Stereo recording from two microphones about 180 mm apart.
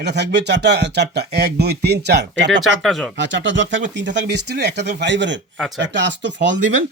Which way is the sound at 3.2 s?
85° right.